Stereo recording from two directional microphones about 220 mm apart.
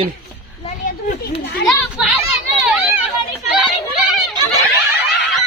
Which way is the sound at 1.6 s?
Centre (ahead or behind).